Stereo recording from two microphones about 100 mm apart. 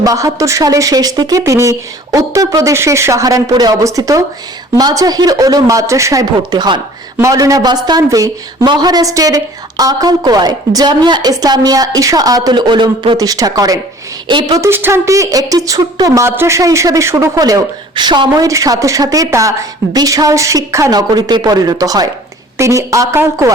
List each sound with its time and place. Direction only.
0.0 s speech: 35° right (ahead or behind)
6.5 s speech: 45° right (ahead or behind)
7.2 s speech: 35° right (ahead or behind); by 13.1 s 55° right (ahead or behind)
13.1 s speech: 40° right (ahead or behind)
14.3 s speech: 50° right (ahead or behind)
14.6 s speech: 25° right (ahead or behind); by 18.4 s 45° right (ahead or behind)
18.4 s speech: 35° right (ahead or behind)
20.9 s speech: 45° right (ahead or behind); by 23.5 s 30° right (ahead or behind)